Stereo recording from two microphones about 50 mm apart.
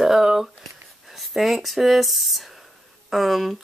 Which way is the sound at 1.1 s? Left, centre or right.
Centre.